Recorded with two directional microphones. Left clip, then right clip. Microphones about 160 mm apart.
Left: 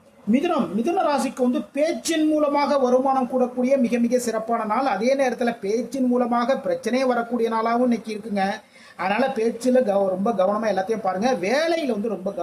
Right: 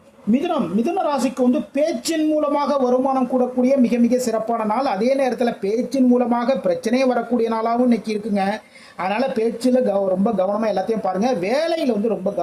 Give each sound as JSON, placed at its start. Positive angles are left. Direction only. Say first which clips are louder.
{"t": 0.3, "sound": "a woman's voice", "louder": "right 1 dB", "side_deg": -15}
{"t": 9.0, "sound": "speech", "louder": "right 1 dB", "side_deg": -25}